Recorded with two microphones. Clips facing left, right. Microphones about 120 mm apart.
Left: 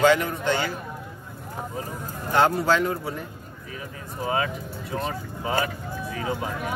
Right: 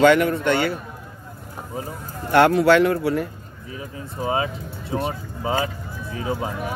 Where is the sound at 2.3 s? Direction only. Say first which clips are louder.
Right 6 dB; 75° right (ahead or behind).